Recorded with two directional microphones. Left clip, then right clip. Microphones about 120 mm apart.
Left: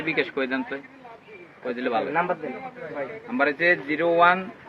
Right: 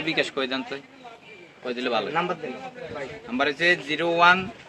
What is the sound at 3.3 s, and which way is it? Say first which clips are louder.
Speech: left 1 dB; 20° right (ahead or behind).